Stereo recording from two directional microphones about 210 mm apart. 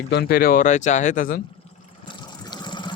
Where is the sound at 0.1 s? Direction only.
50° left (ahead or behind).